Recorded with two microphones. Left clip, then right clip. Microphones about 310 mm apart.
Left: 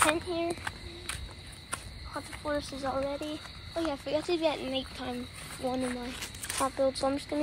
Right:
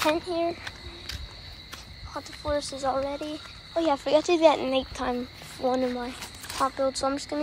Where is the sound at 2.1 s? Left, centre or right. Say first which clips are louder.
Right 4 dB; centre.